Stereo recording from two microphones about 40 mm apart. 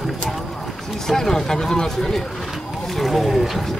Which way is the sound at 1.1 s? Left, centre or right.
Centre.